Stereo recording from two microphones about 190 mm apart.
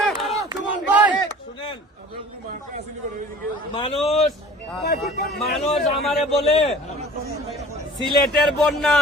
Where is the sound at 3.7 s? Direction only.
30° left (ahead or behind).